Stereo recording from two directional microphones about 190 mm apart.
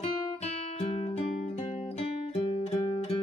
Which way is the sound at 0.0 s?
30° left (ahead or behind).